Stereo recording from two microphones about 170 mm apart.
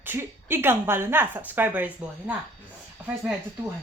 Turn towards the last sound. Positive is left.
turn(degrees=-5)  # may be behind; listen again after turning